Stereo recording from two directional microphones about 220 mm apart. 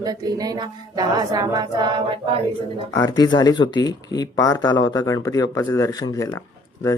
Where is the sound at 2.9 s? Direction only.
15° left (ahead or behind).